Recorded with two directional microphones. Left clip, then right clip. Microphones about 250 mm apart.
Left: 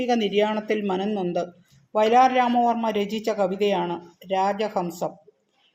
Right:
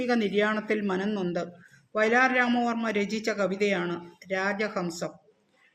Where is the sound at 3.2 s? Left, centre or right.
Left.